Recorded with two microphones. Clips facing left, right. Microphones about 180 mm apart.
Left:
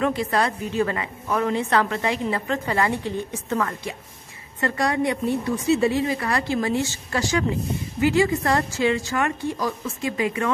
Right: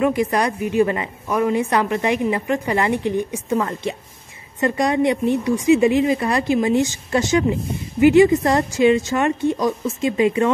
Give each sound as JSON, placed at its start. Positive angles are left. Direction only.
{"t": 0.0, "sound": "a woman's voice", "side_deg": -15}